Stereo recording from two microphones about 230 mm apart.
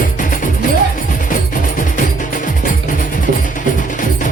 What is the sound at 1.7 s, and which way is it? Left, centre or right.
Music, left.